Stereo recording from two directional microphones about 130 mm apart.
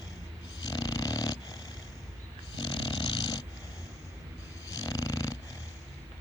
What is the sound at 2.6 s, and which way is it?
Dog, 40° left (ahead or behind).